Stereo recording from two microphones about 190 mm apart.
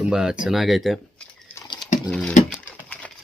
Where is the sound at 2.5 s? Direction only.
5° left (ahead or behind).